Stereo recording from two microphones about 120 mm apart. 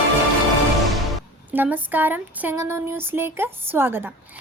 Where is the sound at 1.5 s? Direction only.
15° right (ahead or behind).